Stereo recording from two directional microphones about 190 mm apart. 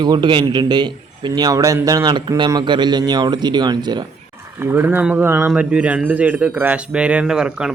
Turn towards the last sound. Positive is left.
turn(degrees=-5)  # may be behind; listen again after turning